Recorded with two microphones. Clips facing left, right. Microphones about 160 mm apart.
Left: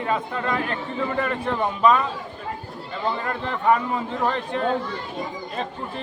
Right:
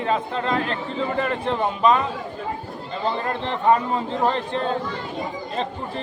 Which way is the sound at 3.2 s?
30° right (ahead or behind).